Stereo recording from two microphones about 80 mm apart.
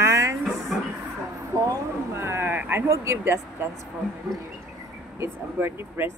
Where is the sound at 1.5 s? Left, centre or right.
Right.